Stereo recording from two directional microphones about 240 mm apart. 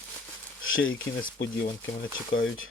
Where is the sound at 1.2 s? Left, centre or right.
Left.